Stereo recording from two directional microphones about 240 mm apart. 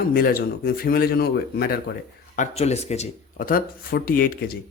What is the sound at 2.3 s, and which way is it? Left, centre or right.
A man's voice, left.